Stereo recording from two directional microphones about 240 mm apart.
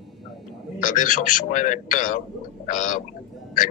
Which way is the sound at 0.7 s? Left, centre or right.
Left.